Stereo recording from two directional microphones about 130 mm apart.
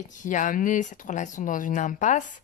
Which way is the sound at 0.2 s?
80° left.